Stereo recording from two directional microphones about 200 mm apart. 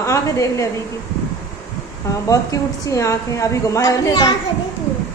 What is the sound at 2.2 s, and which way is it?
A woman's voice, 15° left (ahead or behind).